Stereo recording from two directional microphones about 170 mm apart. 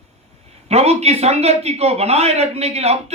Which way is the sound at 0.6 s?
40° right (ahead or behind).